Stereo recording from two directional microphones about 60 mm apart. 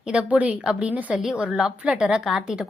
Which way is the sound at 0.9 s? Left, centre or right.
Right.